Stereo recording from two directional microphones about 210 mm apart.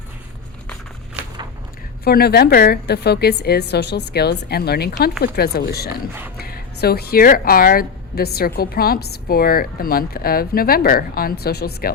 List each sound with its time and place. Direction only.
2.0 s a woman's voice: 50° left (ahead or behind)
6.3 s a sound: 45° left (ahead or behind)
6.8 s a woman's voice: 50° left (ahead or behind)